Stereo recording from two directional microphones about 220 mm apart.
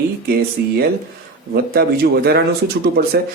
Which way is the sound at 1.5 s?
45° right (ahead or behind).